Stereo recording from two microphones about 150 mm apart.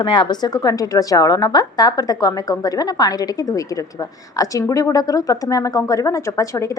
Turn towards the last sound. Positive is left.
turn(degrees=20)  # may be behind; listen again after turning